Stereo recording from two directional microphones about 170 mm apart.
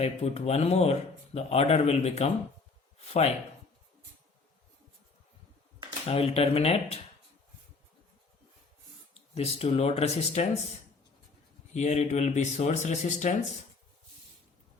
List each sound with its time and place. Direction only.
0.0 s speech: 40° left (ahead or behind)
6.1 s speech: 35° left (ahead or behind)
9.3 s speech: 35° left (ahead or behind)
11.7 s speech: 40° left (ahead or behind)